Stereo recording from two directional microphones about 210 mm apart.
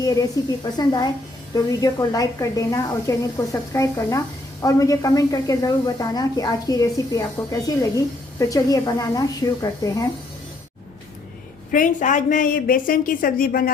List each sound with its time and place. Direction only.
0.0 s a woman's voice: 15° left (ahead or behind)
11.7 s a woman's voice: 40° left (ahead or behind)